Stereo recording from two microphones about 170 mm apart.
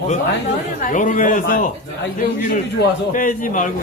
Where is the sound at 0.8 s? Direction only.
50° left (ahead or behind).